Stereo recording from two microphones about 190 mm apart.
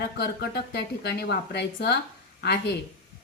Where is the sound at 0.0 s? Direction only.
60° left (ahead or behind).